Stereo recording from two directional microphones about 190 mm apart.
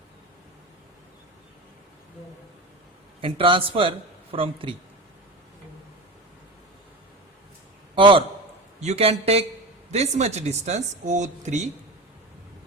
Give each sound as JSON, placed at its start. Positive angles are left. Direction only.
{"t": 3.2, "sound": "speech", "side_deg": -30}
{"t": 7.9, "sound": "a man's voice", "side_deg": -25}